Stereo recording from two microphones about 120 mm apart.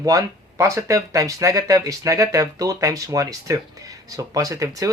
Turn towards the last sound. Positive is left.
turn(degrees=-25)  # may be behind; listen again after turning